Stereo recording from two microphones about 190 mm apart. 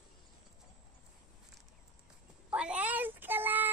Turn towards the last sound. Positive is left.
turn(degrees=-10)  # may be behind; listen again after turning